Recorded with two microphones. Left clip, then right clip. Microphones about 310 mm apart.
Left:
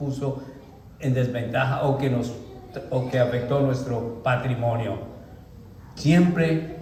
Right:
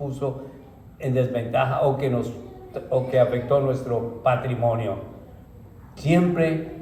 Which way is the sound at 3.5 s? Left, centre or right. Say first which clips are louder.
Right 3 dB; centre.